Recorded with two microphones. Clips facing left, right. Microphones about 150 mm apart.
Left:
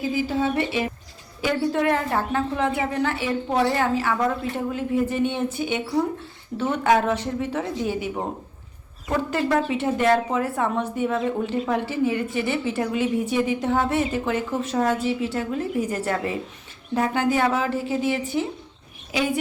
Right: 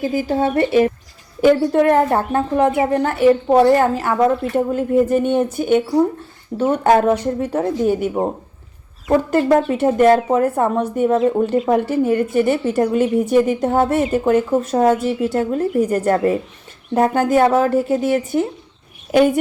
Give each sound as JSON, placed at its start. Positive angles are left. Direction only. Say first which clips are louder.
{"t": 0.0, "sound": "a woman's voice", "louder": "right 5 dB", "side_deg": -45}